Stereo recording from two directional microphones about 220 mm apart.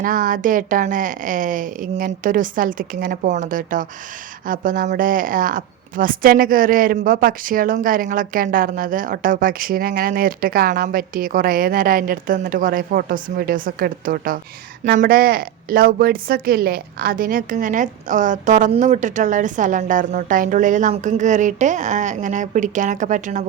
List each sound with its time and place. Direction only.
0.0 s a woman's voice: 35° right (ahead or behind)